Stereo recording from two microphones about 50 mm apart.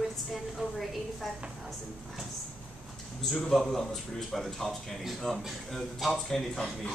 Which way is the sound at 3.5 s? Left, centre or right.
Centre.